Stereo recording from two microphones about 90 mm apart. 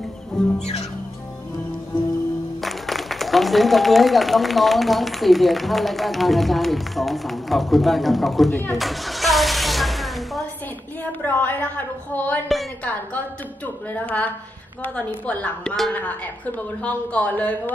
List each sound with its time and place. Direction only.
0.4 s music: 5° left (ahead or behind)
2.6 s speech: centre (ahead or behind)
8.7 s a sound: centre (ahead or behind)
11.1 s a sound: 20° left (ahead or behind)
13.9 s a woman's voice: 20° left (ahead or behind)
15.9 s a woman's voice: 15° left (ahead or behind)